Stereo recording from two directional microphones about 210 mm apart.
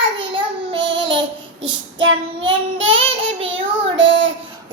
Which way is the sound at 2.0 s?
65° right (ahead or behind).